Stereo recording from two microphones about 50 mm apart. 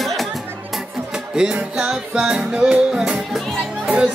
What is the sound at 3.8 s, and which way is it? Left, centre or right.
Speech, right.